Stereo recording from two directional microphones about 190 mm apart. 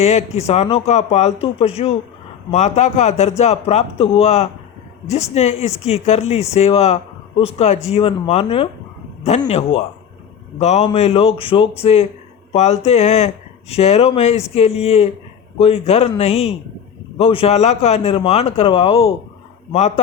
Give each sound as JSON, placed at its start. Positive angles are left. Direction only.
{"t": 0.0, "sound": "speech", "side_deg": 35}